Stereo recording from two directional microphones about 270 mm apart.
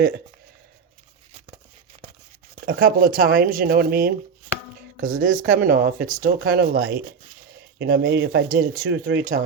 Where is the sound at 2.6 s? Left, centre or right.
Right.